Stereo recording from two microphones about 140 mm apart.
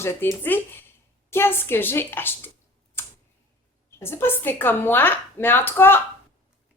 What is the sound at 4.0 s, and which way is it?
A woman's voice, 15° left (ahead or behind).